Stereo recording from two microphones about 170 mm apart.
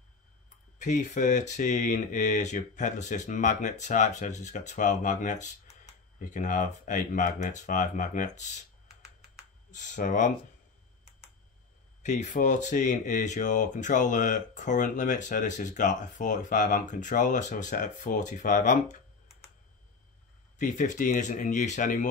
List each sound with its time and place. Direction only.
0.7 s speech: 45° left (ahead or behind)
9.7 s speech: 45° left (ahead or behind)
12.0 s speech: 45° left (ahead or behind)
20.5 s speech: 50° left (ahead or behind)